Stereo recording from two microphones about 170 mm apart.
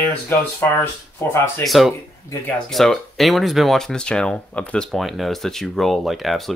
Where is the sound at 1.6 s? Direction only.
Centre (ahead or behind).